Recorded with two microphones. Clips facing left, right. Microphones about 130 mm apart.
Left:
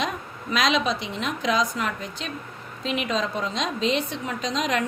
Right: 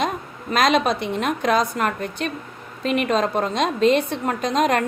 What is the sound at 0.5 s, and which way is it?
A woman's voice, 50° right (ahead or behind).